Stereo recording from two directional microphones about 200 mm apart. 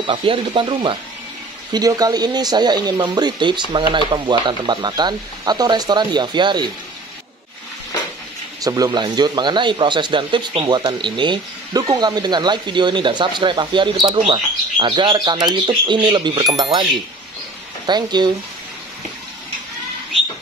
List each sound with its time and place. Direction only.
0.0 s speech: 25° right (ahead or behind)
8.6 s speech: 20° right (ahead or behind)